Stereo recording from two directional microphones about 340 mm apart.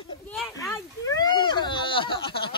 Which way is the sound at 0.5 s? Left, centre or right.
Centre.